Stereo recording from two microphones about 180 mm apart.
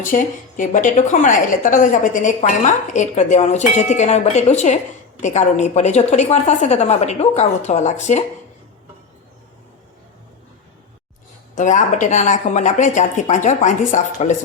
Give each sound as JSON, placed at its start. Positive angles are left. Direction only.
{"t": 0.0, "sound": "a woman's voice", "side_deg": 45}
{"t": 11.5, "sound": "a woman's voice", "side_deg": 45}